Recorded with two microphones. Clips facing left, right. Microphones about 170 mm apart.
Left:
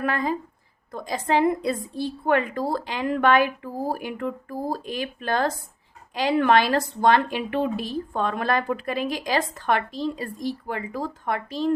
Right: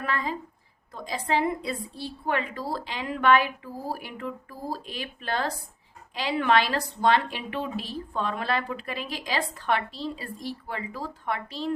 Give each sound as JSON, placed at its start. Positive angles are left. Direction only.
{"t": 0.0, "sound": "a woman's voice", "side_deg": 45}